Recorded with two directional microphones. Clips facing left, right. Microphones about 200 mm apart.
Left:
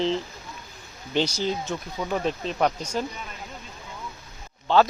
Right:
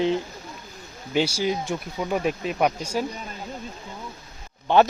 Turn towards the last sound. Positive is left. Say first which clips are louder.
# right 2 dB
turn(degrees=-20)  # may be behind; listen again after turning